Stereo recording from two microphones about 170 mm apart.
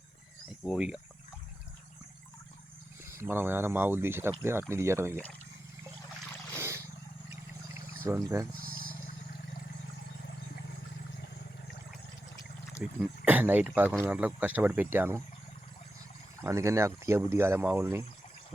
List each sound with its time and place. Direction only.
0.6 s speech: 5° right (ahead or behind)
3.1 s speech: 15° right (ahead or behind)
6.6 s a sound: 15° right (ahead or behind)
7.7 s pour: 15° right (ahead or behind)
8.6 s wild animals: 60° right (ahead or behind)
12.8 s speech: 10° right (ahead or behind)
16.4 s speech: 15° right (ahead or behind)